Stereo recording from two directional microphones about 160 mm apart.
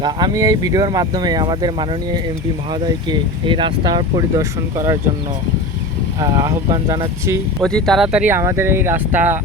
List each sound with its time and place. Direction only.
0.0 s speech: 25° right (ahead or behind)
6.1 s speech: 20° right (ahead or behind)
7.6 s speech: 5° left (ahead or behind); by 9.4 s 15° right (ahead or behind)